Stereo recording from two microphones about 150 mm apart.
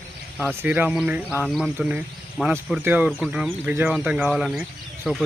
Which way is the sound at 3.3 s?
10° right (ahead or behind).